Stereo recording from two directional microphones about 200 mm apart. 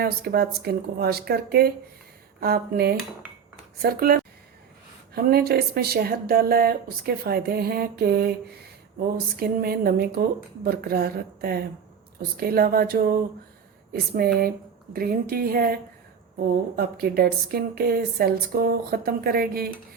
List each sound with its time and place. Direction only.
0.0 s speech: 50° right (ahead or behind)
14.2 s speech: 50° right (ahead or behind)